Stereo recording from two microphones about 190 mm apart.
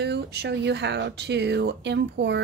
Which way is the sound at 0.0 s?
60° right (ahead or behind).